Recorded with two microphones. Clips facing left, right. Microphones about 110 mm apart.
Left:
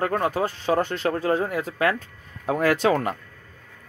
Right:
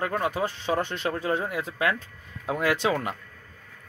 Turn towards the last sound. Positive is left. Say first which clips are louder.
# left 4 dB
turn(degrees=45)  # may be behind; listen again after turning